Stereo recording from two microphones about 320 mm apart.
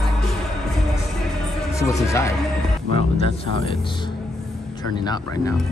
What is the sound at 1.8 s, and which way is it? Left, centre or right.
Speech, centre.